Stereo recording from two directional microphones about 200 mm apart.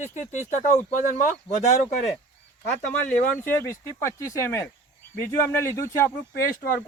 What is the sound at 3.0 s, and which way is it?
Speech, 10° left (ahead or behind).